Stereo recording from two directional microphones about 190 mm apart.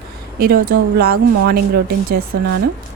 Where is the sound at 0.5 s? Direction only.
50° right (ahead or behind).